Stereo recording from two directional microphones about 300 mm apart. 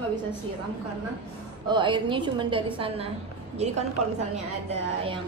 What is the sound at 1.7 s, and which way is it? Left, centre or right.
Speech, centre.